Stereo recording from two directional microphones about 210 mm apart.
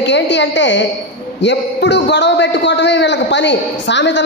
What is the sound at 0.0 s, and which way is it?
A man's voice, 55° left (ahead or behind).